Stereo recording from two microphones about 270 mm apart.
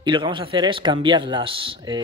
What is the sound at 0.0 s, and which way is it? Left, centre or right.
Speech, centre.